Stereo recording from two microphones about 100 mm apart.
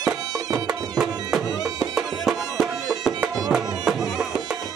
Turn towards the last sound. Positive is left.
turn(degrees=-5)  # may be behind; listen again after turning